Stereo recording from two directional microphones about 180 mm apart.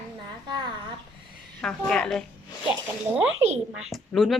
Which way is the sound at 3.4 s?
35° right (ahead or behind).